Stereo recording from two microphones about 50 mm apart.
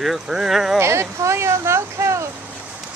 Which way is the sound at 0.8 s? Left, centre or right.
Right.